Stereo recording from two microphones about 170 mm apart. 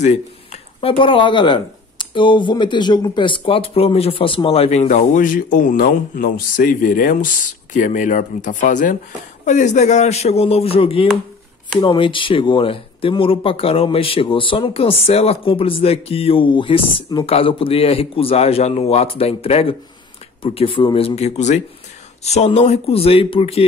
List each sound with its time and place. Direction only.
0.0 s speech: 40° left (ahead or behind)